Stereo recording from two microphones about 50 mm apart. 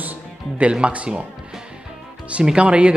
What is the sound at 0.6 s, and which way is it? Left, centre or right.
Speech, right.